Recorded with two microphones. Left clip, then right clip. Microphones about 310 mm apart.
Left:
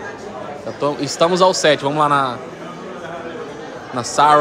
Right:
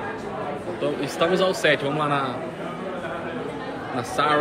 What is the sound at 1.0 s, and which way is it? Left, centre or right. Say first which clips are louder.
A man's voice: left 8 dB; centre.